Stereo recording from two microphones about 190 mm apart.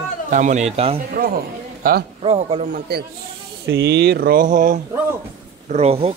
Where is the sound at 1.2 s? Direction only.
55° right (ahead or behind).